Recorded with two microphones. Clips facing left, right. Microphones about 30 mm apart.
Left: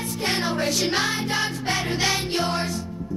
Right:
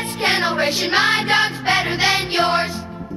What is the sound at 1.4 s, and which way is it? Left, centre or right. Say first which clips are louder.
Music: right 7 dB; right.